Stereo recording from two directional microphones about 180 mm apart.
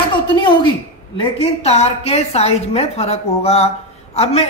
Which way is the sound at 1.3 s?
35° left (ahead or behind).